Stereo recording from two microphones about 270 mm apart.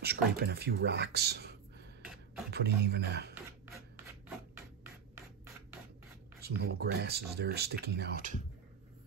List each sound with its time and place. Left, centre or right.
0.0 s speech: right
6.4 s speech: right